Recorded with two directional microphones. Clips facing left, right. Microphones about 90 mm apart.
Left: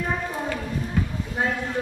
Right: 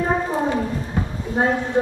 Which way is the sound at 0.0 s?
30° right (ahead or behind).